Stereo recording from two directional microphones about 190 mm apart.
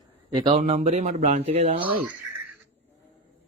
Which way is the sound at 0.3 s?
30° right (ahead or behind).